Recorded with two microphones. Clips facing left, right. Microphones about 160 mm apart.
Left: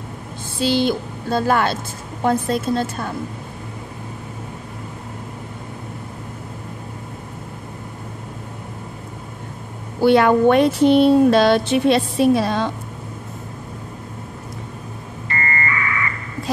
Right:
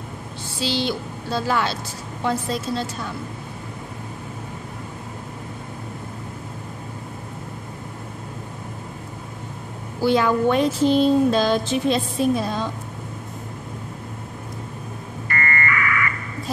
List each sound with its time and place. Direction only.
0.6 s a woman's voice: 50° left (ahead or behind)
9.9 s speech: 60° left (ahead or behind)
15.2 s a sound: 30° left (ahead or behind)